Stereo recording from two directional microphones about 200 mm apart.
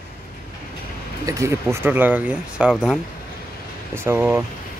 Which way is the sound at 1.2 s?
15° right (ahead or behind).